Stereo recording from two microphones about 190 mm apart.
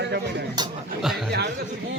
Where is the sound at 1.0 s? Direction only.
Centre (ahead or behind).